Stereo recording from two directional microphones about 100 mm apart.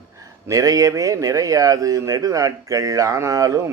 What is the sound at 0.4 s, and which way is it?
Speech, 35° right (ahead or behind).